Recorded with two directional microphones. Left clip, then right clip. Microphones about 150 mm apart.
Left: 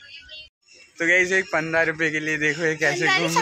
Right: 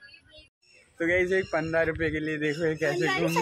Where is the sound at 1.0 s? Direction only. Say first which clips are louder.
Left 6 dB; centre (ahead or behind).